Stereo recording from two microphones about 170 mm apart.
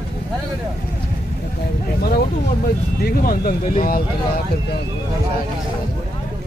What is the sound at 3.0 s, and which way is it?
Speech, 60° left (ahead or behind).